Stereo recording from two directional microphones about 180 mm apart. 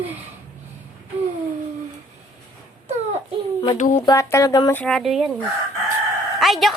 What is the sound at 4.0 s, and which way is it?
Speech, 20° left (ahead or behind).